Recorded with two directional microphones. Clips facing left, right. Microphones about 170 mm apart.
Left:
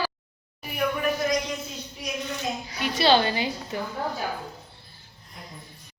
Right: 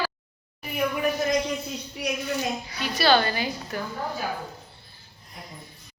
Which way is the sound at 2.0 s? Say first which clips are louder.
Right 4 dB; 70° right (ahead or behind).